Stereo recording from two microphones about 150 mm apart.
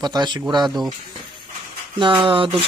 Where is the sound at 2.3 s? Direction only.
35° right (ahead or behind).